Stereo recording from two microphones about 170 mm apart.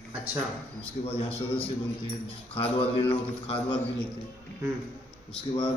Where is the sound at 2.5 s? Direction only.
35° left (ahead or behind).